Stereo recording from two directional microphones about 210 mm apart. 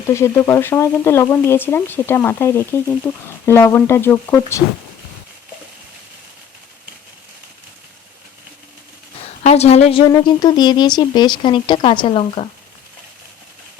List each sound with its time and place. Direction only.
0.1 s speech: 15° left (ahead or behind)
9.4 s a woman's voice: 30° left (ahead or behind)
10.1 s speech: 20° left (ahead or behind)